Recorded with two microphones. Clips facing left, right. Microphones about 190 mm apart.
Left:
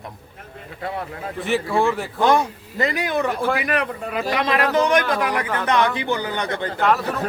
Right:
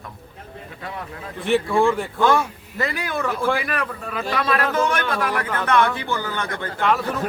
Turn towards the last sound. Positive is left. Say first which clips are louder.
# left 1 dB
turn(degrees=0)  # may be behind; listen again after turning